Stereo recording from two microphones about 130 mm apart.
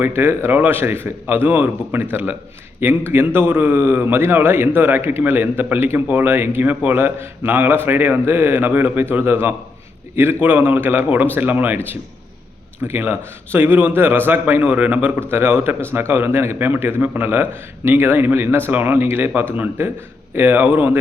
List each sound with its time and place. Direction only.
0.0 s a man's voice: 15° right (ahead or behind)
3.1 s a man's voice: 15° right (ahead or behind)
12.8 s a man's voice: 15° right (ahead or behind)